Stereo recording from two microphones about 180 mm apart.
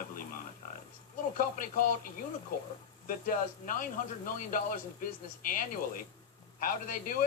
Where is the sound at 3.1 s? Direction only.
50° left (ahead or behind).